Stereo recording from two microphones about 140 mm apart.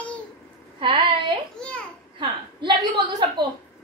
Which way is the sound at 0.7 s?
40° right (ahead or behind).